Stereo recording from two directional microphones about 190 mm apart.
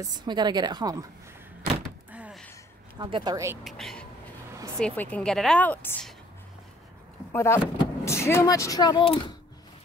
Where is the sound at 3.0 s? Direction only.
25° right (ahead or behind).